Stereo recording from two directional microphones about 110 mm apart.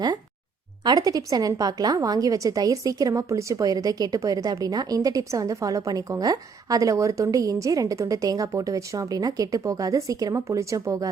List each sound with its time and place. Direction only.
0.9 s a woman's voice: 35° right (ahead or behind)